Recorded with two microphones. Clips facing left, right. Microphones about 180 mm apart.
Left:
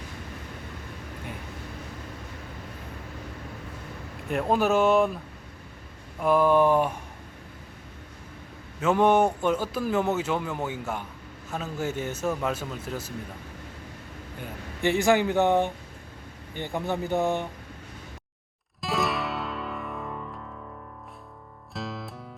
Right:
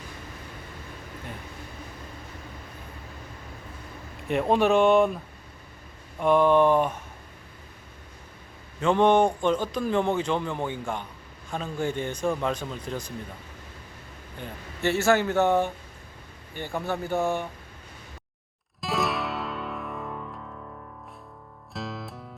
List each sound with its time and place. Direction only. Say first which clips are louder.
4.3 s speech: right 2 dB; centre (ahead or behind)
6.1 s speech: right 1 dB; 5° left (ahead or behind)
8.8 s speech: right 1 dB; 5° left (ahead or behind)
14.4 s speech: left 1 dB; 15° left (ahead or behind)
18.8 s music: even; centre (ahead or behind)
21.7 s music: even; centre (ahead or behind)